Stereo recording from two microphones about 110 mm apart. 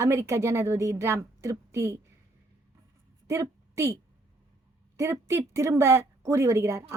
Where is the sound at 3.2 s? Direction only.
25° right (ahead or behind).